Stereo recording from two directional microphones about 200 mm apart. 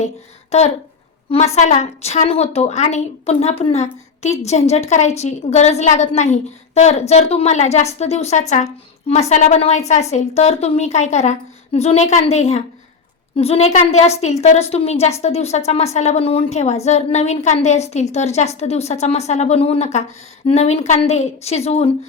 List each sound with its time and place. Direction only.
0.5 s a woman's voice: 30° left (ahead or behind)